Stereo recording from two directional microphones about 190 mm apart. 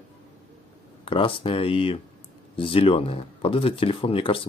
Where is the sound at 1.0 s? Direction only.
25° left (ahead or behind).